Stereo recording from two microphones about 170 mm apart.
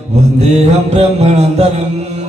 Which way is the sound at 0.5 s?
40° right (ahead or behind).